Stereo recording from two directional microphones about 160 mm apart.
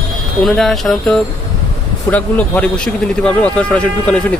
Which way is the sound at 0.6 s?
Centre (ahead or behind).